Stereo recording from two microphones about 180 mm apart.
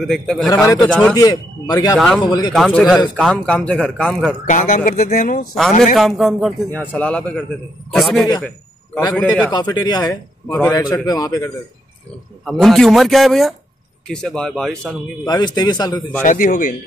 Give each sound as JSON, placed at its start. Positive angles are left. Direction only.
{"t": 0.0, "sound": "a man's voice", "side_deg": 5}
{"t": 1.1, "sound": "a man's voice", "side_deg": 20}
{"t": 2.5, "sound": "a man's voice", "side_deg": 0}
{"t": 4.5, "sound": "speech", "side_deg": 45}
{"t": 5.9, "sound": "a man's voice", "side_deg": 0}
{"t": 8.4, "sound": "a sound", "side_deg": 5}
{"t": 9.1, "sound": "a man's voice", "side_deg": 5}
{"t": 9.5, "sound": "a man's voice", "side_deg": 20}
{"t": 12.4, "sound": "a man's voice", "side_deg": 0}
{"t": 15.2, "sound": "a man's voice", "side_deg": 20}
{"t": 16.2, "sound": "speech", "side_deg": 45}